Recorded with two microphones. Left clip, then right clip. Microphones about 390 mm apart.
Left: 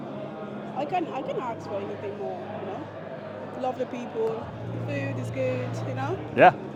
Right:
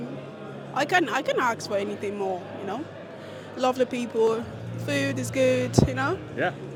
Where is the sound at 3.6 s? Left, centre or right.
Right.